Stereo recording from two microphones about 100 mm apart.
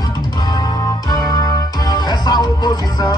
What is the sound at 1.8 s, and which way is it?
Music, 45° left (ahead or behind).